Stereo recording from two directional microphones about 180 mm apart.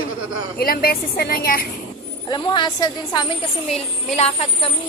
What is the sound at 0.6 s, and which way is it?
A woman's voice, 55° left (ahead or behind).